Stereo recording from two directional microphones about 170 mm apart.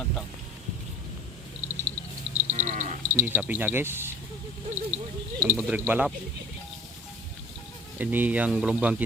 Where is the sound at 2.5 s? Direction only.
45° right (ahead or behind).